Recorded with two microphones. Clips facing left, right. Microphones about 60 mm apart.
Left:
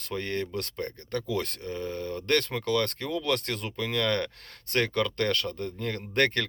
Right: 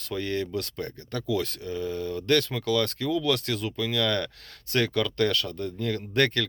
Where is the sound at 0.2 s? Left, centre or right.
Left.